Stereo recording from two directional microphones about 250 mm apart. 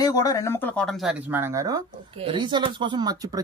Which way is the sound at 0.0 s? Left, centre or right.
Centre.